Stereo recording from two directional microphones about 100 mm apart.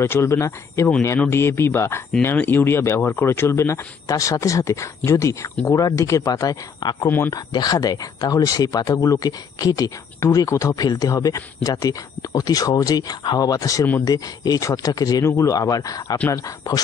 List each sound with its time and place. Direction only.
0.0 s speech: 25° left (ahead or behind); by 7.1 s 40° left (ahead or behind)
7.1 s speech: 20° left (ahead or behind)
7.3 s speech: 40° left (ahead or behind)